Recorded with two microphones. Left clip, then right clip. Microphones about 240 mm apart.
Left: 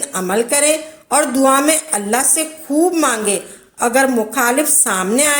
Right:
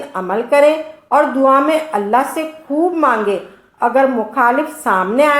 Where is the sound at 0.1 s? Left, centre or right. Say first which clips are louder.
Right 2 dB; left.